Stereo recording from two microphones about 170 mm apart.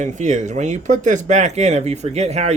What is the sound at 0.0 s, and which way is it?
Speech, 45° right (ahead or behind).